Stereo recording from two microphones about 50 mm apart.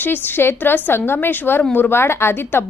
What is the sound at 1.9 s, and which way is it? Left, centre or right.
Speech, left.